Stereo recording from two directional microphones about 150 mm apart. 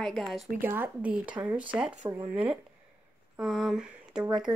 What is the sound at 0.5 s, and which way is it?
Speech, 15° right (ahead or behind).